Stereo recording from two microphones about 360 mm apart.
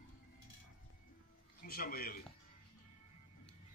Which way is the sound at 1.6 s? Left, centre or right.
Left.